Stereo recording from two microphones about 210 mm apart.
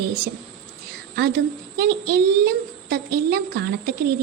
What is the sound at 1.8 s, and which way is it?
A child's voice, 50° right (ahead or behind).